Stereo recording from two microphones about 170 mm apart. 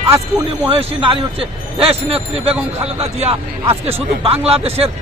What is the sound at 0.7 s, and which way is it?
A man's voice, 30° right (ahead or behind).